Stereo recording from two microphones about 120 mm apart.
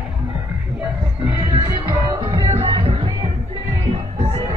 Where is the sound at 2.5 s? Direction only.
50° right (ahead or behind).